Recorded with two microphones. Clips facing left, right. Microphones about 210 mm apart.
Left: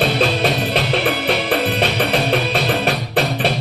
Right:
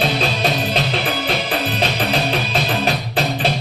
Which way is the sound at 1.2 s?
60° left (ahead or behind).